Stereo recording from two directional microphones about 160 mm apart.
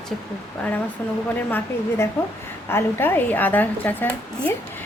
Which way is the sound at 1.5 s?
15° left (ahead or behind).